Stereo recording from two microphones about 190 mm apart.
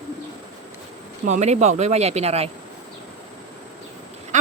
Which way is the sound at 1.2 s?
40° right (ahead or behind).